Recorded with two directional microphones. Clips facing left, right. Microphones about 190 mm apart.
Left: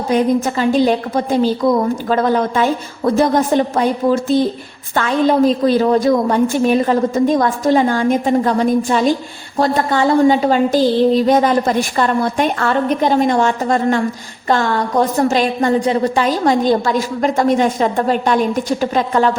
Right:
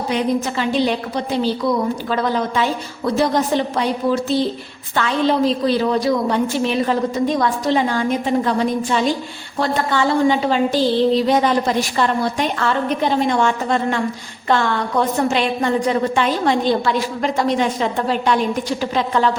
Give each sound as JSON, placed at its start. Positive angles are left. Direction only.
{"t": 0.1, "sound": "a woman's voice", "side_deg": 45}